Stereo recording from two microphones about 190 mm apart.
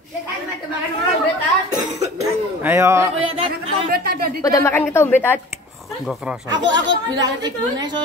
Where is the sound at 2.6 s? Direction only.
15° right (ahead or behind).